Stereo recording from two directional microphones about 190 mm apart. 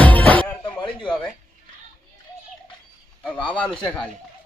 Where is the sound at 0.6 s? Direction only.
25° left (ahead or behind).